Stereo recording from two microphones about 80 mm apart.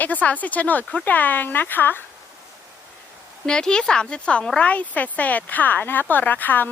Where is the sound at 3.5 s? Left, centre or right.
Centre.